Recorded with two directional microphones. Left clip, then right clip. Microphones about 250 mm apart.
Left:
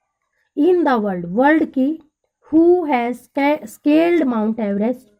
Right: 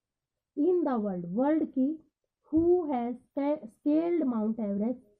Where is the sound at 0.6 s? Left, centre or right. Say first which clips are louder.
Left 12 dB; left.